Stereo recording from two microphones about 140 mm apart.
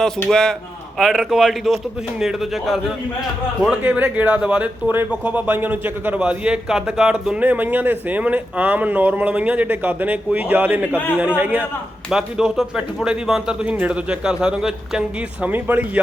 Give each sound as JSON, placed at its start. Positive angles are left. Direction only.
{"t": 0.3, "sound": "a man's voice", "side_deg": 5}